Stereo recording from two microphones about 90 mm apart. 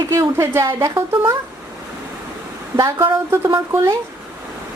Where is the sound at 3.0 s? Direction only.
25° right (ahead or behind).